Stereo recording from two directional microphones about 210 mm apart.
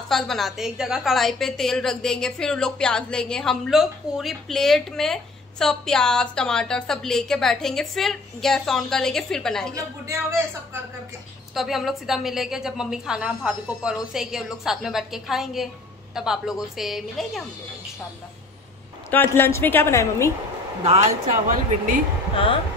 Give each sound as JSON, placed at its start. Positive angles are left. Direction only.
{"t": 0.1, "sound": "a woman's voice", "side_deg": 0}
{"t": 9.8, "sound": "speech", "side_deg": -15}
{"t": 11.5, "sound": "a woman's voice", "side_deg": 0}
{"t": 19.0, "sound": "a woman's voice", "side_deg": 10}
{"t": 20.8, "sound": "speech", "side_deg": -30}